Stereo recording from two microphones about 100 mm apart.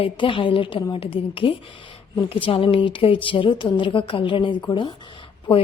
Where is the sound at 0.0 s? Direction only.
60° left (ahead or behind).